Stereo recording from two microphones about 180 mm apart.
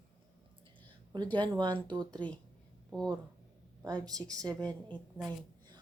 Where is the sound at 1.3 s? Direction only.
25° right (ahead or behind).